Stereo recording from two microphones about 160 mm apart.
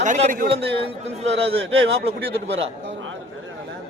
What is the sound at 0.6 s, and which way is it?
Speech, 35° right (ahead or behind).